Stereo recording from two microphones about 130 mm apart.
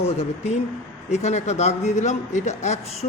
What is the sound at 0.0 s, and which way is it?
A man's voice, 55° left (ahead or behind).